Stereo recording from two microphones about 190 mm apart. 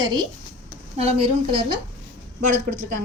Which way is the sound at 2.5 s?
40° right (ahead or behind).